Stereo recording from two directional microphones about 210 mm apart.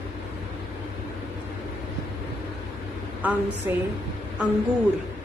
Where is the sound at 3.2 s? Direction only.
5° right (ahead or behind).